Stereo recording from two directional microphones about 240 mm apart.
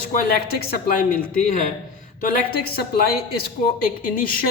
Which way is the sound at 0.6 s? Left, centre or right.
Left.